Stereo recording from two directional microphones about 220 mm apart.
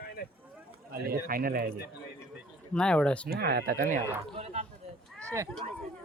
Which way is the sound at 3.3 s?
45° right (ahead or behind).